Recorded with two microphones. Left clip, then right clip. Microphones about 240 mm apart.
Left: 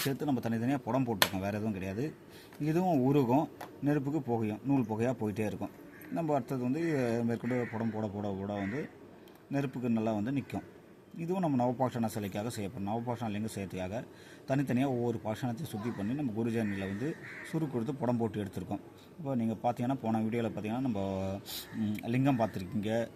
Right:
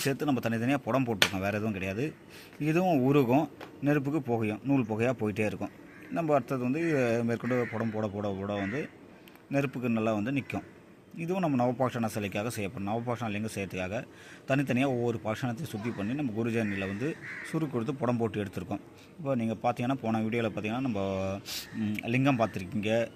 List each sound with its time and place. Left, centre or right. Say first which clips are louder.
0.0 s speech: right 4 dB; centre